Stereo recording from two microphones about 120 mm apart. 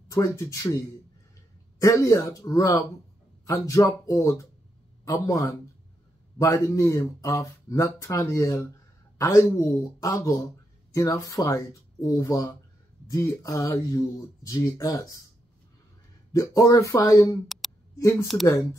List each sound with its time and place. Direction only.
0.1 s speech: 25° left (ahead or behind)
1.8 s speech: 25° left (ahead or behind)
16.3 s speech: 30° left (ahead or behind)